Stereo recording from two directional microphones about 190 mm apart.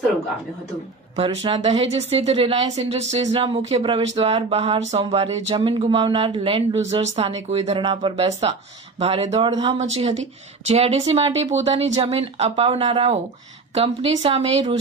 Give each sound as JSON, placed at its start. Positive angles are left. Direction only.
{"t": 1.1, "sound": "a woman's voice", "side_deg": -30}